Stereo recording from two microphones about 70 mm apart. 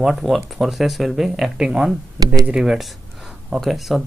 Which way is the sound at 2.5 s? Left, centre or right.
Centre.